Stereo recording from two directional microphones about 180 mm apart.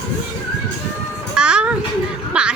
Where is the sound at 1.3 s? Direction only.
5° right (ahead or behind).